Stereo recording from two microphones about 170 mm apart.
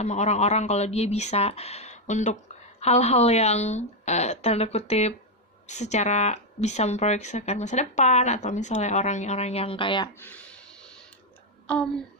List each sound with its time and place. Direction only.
0.0 s speech: 40° left (ahead or behind)
10.2 s a sound: 5° left (ahead or behind)
11.6 s speech: 5° left (ahead or behind)